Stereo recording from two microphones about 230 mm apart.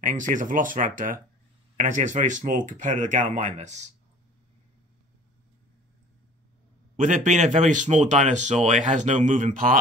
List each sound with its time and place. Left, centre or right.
0.0 s speech: right
7.0 s speech: right